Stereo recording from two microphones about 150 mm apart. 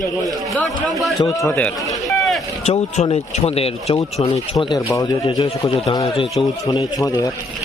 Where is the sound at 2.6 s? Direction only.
40° left (ahead or behind).